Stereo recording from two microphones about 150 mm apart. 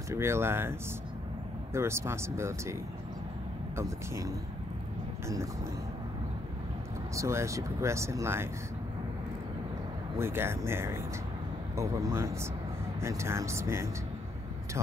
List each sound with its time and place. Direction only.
0.1 s speech: 15° right (ahead or behind)
3.7 s speech: 20° right (ahead or behind)
7.2 s speech: 20° right (ahead or behind)
10.1 s speech: 15° right (ahead or behind)